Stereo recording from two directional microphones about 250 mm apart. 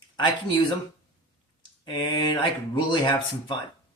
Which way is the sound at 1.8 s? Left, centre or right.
Left.